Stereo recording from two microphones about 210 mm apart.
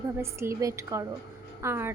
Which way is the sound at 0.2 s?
10° right (ahead or behind).